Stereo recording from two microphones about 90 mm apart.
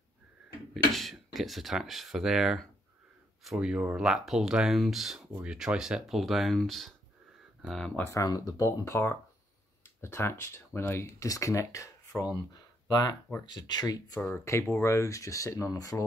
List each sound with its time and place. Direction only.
0.9 s speech: centre (ahead or behind)
8.0 s speech: 30° left (ahead or behind)
12.4 s speech: 50° left (ahead or behind)
14.4 s speech: 30° left (ahead or behind)